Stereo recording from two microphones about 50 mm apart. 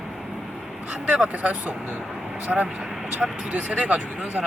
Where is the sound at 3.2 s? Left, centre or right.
Right.